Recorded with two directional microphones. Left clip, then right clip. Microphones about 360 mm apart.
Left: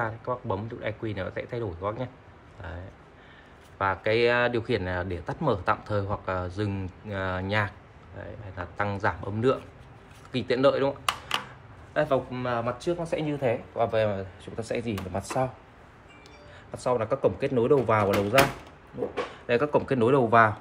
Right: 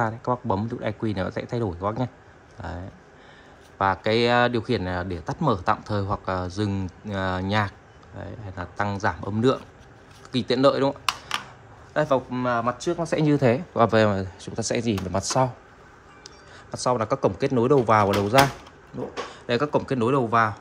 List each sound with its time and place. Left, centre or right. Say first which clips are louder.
0.0 s speech: right 5 dB; centre
16.7 s speech: right 3 dB; centre
19.4 s speech: right 1 dB; centre